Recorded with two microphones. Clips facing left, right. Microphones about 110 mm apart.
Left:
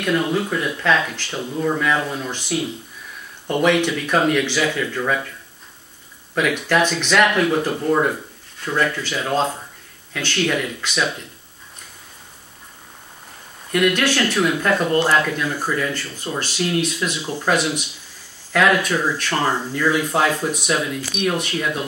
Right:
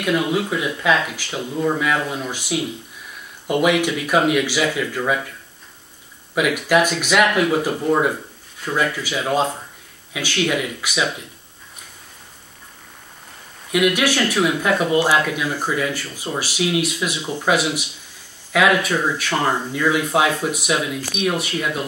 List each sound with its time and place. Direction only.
0.0 s speech: 10° right (ahead or behind)
6.3 s speech: 10° right (ahead or behind)
13.7 s speech: 10° right (ahead or behind)
17.2 s speech: 5° left (ahead or behind)